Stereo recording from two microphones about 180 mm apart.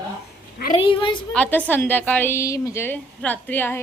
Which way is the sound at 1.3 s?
10° left (ahead or behind).